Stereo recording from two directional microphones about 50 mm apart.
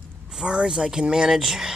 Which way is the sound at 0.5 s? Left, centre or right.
Centre.